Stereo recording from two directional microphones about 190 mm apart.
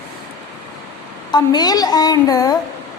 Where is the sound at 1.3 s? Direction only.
20° left (ahead or behind).